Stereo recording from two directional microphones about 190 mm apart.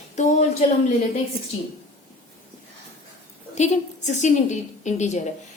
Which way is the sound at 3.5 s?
35° left (ahead or behind).